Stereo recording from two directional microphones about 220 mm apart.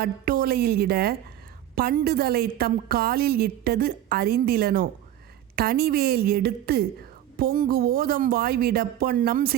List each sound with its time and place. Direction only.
0.0 s a woman's voice: 45° right (ahead or behind)